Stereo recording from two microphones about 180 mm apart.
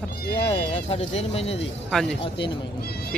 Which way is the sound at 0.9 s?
35° left (ahead or behind).